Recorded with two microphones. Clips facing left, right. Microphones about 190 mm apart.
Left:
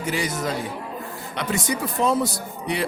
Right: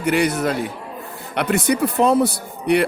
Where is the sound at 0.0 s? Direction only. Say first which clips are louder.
Right 7 dB; 65° right (ahead or behind).